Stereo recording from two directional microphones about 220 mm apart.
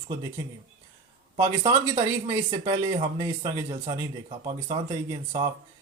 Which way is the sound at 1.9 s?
25° right (ahead or behind).